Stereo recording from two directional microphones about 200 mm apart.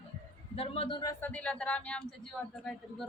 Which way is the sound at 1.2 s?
5° left (ahead or behind).